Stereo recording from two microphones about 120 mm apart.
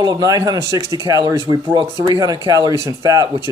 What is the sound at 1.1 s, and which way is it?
Speech, 30° right (ahead or behind).